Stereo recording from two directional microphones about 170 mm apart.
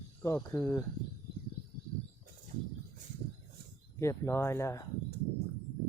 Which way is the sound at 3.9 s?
15° left (ahead or behind).